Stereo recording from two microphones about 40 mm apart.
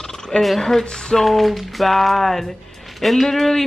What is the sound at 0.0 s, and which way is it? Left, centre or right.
Frog, centre.